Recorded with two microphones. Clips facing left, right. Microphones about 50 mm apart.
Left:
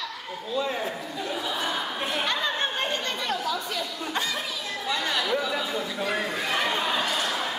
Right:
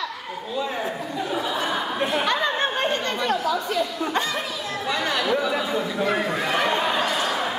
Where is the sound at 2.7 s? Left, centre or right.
Centre.